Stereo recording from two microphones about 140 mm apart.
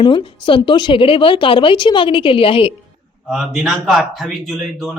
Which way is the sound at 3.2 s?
5° right (ahead or behind).